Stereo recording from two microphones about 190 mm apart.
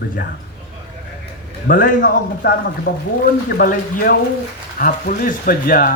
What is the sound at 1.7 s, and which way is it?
A man's voice, 45° left (ahead or behind).